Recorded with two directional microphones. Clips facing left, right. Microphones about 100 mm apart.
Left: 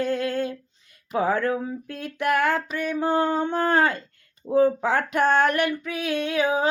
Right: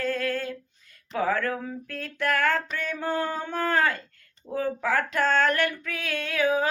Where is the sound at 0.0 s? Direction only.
20° left (ahead or behind).